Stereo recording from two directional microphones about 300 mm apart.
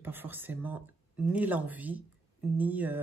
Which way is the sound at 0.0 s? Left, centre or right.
Centre.